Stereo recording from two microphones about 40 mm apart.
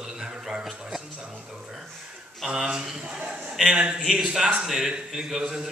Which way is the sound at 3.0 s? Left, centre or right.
Right.